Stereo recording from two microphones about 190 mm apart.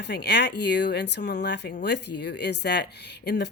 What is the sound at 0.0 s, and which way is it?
Speech, 65° left (ahead or behind).